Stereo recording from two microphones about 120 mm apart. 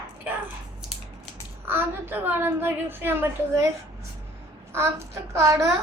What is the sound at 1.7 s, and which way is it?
A woman's voice, 20° right (ahead or behind).